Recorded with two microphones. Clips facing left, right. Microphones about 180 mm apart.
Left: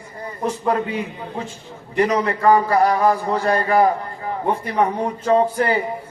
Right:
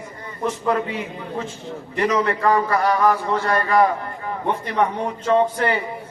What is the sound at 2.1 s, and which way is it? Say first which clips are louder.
A man's voice: left 2 dB; 35° left (ahead or behind).